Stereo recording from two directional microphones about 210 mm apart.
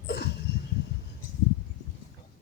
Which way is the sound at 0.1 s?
55° left (ahead or behind).